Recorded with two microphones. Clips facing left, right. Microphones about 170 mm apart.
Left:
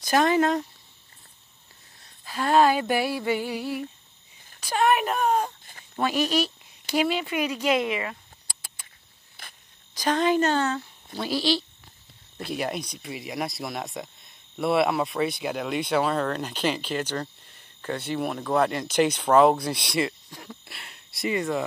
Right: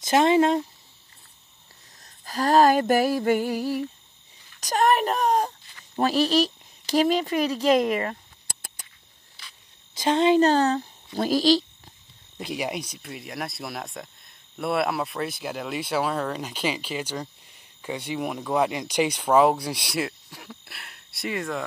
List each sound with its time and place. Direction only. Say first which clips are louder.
0.0 s speech: right 2 dB; 25° right (ahead or behind)
2.0 s a sound: right 3 dB; 40° right (ahead or behind)
4.6 s speech: right 1 dB; 40° right (ahead or behind)
9.4 s cricket: left 2 dB; 50° left (ahead or behind)
9.9 s speech: right 3 dB; 25° right (ahead or behind); by 11.6 s 40° right (ahead or behind)
12.4 s speech: even; 15° right (ahead or behind)